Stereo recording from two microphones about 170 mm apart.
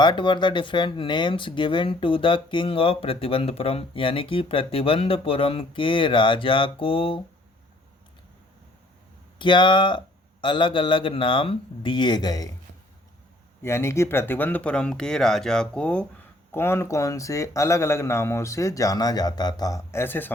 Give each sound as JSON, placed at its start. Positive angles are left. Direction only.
{"t": 0.0, "sound": "speech", "side_deg": 30}
{"t": 9.4, "sound": "speech", "side_deg": 30}
{"t": 13.6, "sound": "speech", "side_deg": 15}